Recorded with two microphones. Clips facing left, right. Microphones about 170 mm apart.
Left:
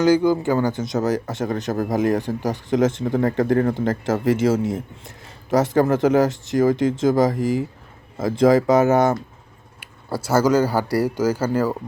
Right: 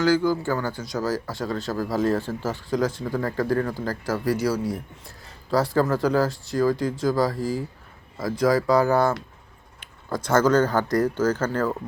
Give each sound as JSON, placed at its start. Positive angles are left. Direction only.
{"t": 0.0, "sound": "speech", "side_deg": 20}
{"t": 9.8, "sound": "speech", "side_deg": 10}